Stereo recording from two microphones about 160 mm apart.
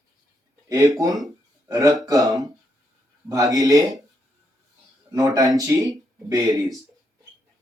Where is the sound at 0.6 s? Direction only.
20° right (ahead or behind).